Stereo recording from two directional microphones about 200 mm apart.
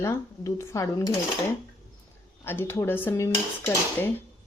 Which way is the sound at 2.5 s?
10° left (ahead or behind).